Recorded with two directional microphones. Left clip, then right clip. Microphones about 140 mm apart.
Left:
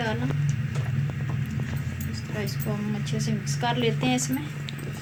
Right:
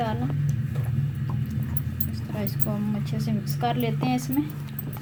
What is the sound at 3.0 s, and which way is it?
A woman's voice, 40° right (ahead or behind).